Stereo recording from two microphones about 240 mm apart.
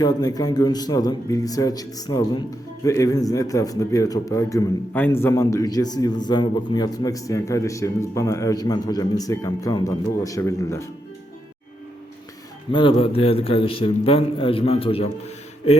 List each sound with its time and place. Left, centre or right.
0.0 s a man's voice: centre
12.7 s a man's voice: left